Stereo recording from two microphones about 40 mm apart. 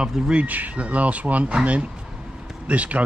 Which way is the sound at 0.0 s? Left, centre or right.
Right.